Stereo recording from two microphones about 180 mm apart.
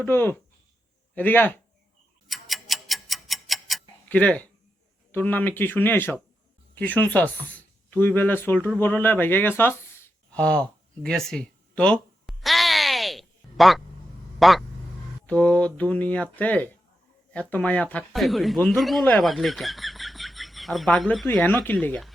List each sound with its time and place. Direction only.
0.0 s speech: 10° left (ahead or behind)
2.2 s tick-tock: centre (ahead or behind)
5.1 s speech: 10° left (ahead or behind)
8.8 s a sound: 10° left (ahead or behind)
14.3 s speech: centre (ahead or behind)